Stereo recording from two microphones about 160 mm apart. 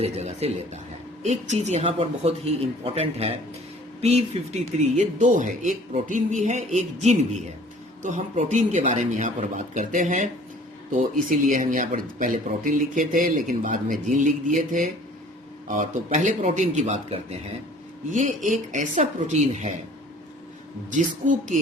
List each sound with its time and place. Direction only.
0.0 s speech: 40° right (ahead or behind)
20.9 s speech: 50° right (ahead or behind)